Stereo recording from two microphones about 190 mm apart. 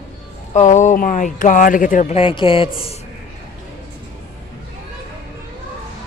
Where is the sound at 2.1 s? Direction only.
25° left (ahead or behind).